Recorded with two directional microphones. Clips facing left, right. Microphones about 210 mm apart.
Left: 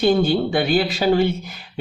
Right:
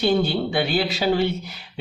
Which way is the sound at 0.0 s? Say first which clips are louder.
Left 4 dB; 45° left (ahead or behind).